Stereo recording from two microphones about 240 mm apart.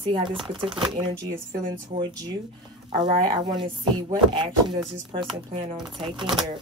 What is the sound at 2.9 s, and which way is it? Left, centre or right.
Speech, centre.